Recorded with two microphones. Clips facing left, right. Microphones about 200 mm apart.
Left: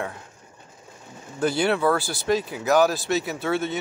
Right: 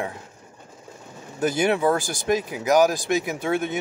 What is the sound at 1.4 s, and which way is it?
Speech, 15° right (ahead or behind).